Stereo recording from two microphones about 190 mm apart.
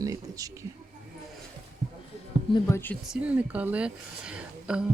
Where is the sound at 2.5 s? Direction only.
15° left (ahead or behind).